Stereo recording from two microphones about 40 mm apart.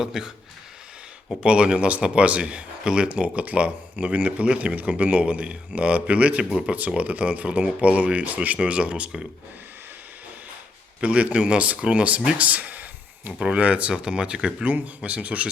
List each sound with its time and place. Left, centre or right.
0.0 s speech: centre
1.4 s a man's voice: right
11.0 s a man's voice: right
11.6 s a man's voice: right
12.4 s a sound: right
13.4 s a man's voice: right
13.9 s a man's voice: right